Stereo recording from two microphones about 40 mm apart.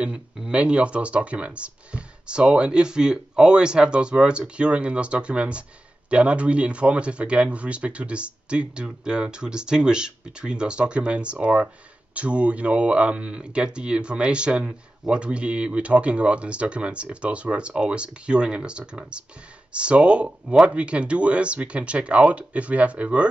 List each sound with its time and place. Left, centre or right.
0.0 s speech: right